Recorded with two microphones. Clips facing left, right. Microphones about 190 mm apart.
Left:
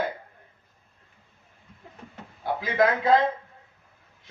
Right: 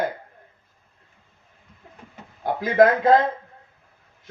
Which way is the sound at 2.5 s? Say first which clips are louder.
Right 7 dB; 45° right (ahead or behind).